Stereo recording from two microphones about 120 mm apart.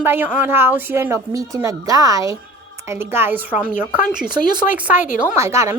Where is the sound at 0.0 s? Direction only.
15° right (ahead or behind).